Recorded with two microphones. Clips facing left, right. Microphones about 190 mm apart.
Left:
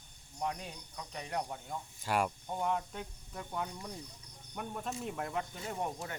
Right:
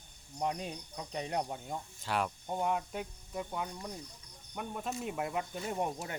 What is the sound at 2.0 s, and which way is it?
Cricket, 10° left (ahead or behind).